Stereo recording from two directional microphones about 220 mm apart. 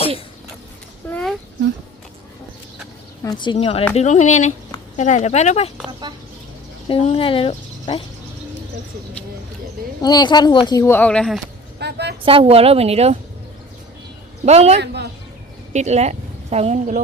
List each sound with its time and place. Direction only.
1.1 s a sound: centre (ahead or behind)
3.2 s speech: 20° left (ahead or behind)
6.8 s speech: 25° left (ahead or behind)
10.0 s speech: 20° left (ahead or behind)
11.8 s a sound: 50° right (ahead or behind)
12.2 s a woman's voice: 25° right (ahead or behind)
14.4 s a woman's voice: 30° right (ahead or behind)